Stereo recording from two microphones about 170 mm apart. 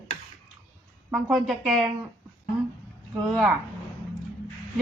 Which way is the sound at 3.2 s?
Centre (ahead or behind).